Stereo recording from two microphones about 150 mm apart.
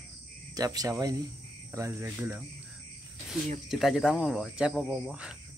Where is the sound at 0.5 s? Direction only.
25° right (ahead or behind).